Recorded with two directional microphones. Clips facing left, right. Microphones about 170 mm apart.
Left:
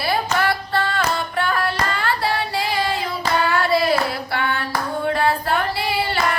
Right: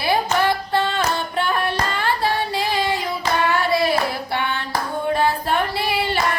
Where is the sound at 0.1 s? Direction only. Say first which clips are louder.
Right 3 dB; 20° right (ahead or behind).